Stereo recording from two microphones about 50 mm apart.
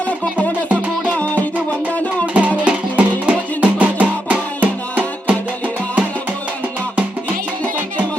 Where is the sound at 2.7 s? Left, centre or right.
Right.